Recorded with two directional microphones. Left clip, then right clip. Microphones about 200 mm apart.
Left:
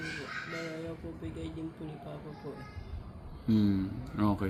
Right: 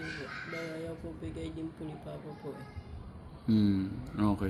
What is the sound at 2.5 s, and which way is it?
Music, 15° right (ahead or behind).